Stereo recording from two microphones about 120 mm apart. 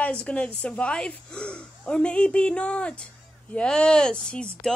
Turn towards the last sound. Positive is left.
turn(degrees=10)  # may be behind; listen again after turning